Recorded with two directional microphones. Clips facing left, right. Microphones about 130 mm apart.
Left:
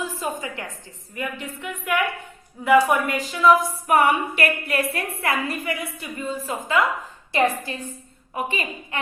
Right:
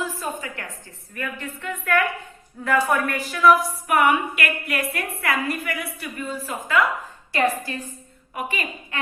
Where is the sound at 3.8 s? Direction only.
35° left (ahead or behind).